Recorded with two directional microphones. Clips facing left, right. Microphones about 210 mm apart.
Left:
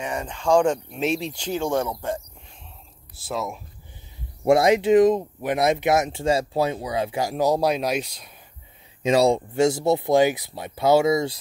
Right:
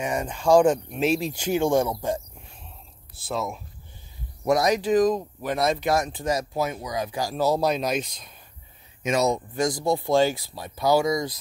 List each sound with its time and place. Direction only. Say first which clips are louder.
0.0 s speech: right 2 dB; 10° right (ahead or behind)
3.3 s speech: even; 5° left (ahead or behind)
4.5 s speech: left 4 dB; 25° left (ahead or behind); by 8.3 s 10° left (ahead or behind)
9.0 s speech: left 5 dB; 30° left (ahead or behind)